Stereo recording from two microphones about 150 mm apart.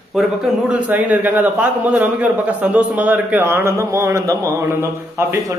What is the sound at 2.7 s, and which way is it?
A man's voice, 10° right (ahead or behind).